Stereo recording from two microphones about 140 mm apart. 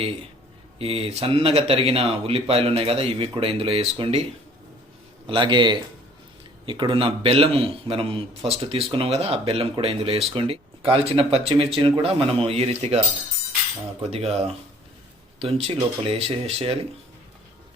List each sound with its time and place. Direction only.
0.8 s a man's voice: 45° right (ahead or behind)
14.1 s speech: 45° right (ahead or behind)